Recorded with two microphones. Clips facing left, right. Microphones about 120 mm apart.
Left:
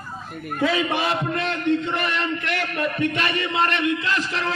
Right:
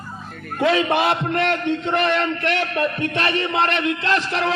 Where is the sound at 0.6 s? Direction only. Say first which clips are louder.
Right 4 dB; 65° right (ahead or behind).